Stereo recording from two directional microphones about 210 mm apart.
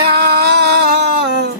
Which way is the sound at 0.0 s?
50° right (ahead or behind).